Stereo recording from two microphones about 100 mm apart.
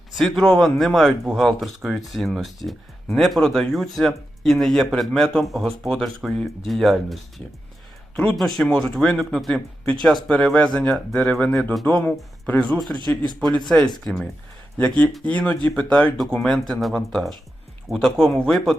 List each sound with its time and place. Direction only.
0.1 s speech: centre (ahead or behind)
11.7 s speech: centre (ahead or behind)
13.0 s a man's voice: 50° right (ahead or behind)
13.7 s speech: 5° left (ahead or behind)